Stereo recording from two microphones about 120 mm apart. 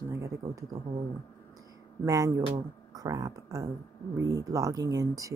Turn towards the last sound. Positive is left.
turn(degrees=-30)  # may be behind; listen again after turning